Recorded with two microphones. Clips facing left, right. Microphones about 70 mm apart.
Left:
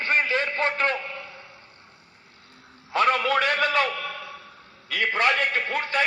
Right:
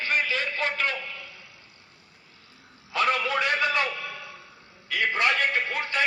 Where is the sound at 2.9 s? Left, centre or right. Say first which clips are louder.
Left 4 dB; left.